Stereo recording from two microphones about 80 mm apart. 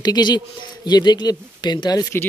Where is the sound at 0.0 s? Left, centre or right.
Left.